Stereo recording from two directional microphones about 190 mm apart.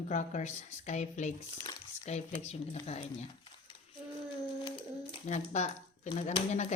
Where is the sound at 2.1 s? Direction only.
35° left (ahead or behind).